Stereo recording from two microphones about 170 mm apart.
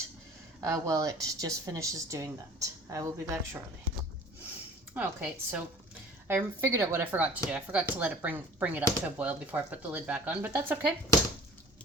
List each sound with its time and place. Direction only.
0.6 s speech: 20° right (ahead or behind)
4.9 s speech: 10° right (ahead or behind)